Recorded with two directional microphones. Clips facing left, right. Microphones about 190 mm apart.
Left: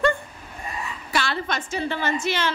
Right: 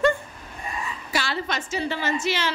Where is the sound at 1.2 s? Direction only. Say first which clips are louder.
Left 1 dB; 55° left (ahead or behind).